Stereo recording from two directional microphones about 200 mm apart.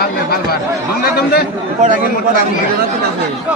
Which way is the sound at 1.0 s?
50° left (ahead or behind).